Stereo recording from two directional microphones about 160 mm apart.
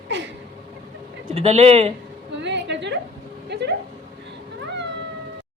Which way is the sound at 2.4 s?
90° right.